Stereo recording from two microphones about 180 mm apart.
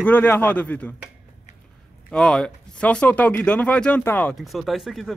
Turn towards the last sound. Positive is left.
turn(degrees=0)  # may be behind; listen again after turning